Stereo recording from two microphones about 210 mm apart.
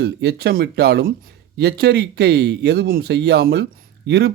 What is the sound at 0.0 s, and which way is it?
Speech, 50° right (ahead or behind).